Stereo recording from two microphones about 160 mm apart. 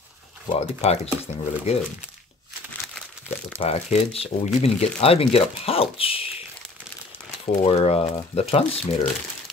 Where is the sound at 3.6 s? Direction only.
40° left (ahead or behind).